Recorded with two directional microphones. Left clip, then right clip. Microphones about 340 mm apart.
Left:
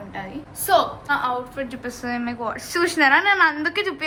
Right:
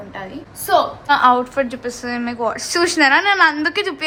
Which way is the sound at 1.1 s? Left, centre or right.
Right.